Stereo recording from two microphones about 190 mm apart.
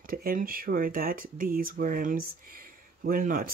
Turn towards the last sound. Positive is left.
turn(degrees=-50)  # may be behind; listen again after turning